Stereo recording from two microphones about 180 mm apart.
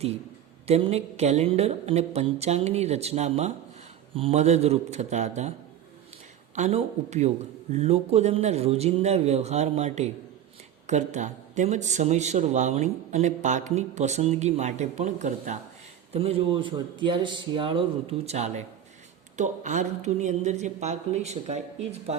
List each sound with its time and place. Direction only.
0.7 s a man's voice: 35° right (ahead or behind)
6.6 s a man's voice: 35° right (ahead or behind)